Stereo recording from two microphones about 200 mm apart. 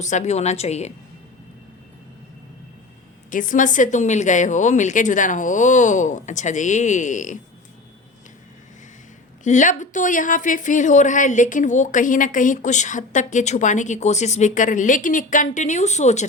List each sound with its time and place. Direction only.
0.0 s speech: 35° left (ahead or behind)
3.2 s speech: 40° left (ahead or behind)
9.4 s speech: 40° left (ahead or behind)